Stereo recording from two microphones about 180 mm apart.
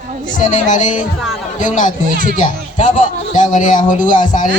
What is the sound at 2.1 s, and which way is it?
Speech, 50° right (ahead or behind).